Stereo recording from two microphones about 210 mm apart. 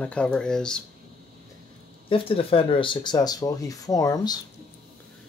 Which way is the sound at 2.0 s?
25° left (ahead or behind).